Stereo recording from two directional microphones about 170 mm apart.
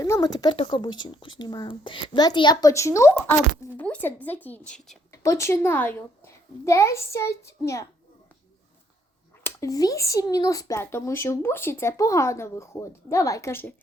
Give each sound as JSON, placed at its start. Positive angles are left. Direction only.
{"t": 0.0, "sound": "a woman's voice", "side_deg": 20}
{"t": 5.1, "sound": "speech", "side_deg": 20}
{"t": 9.4, "sound": "speech", "side_deg": 20}